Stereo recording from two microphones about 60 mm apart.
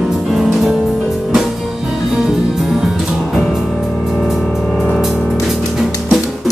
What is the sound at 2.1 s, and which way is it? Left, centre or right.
Music, centre.